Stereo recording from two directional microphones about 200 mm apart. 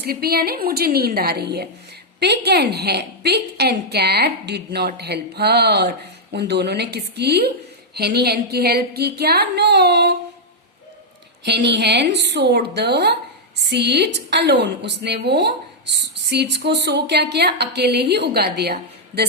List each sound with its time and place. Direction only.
0.0 s a woman's voice: 50° right (ahead or behind)
11.4 s a woman's voice: 55° right (ahead or behind)